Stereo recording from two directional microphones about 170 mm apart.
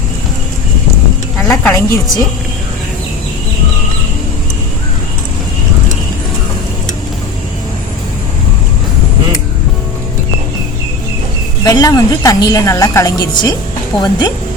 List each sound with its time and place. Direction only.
1.4 s a woman's voice: 15° left (ahead or behind)
11.6 s a woman's voice: 20° left (ahead or behind)